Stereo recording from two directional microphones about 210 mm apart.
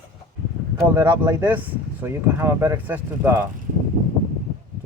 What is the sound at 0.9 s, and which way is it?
Speech, 10° right (ahead or behind).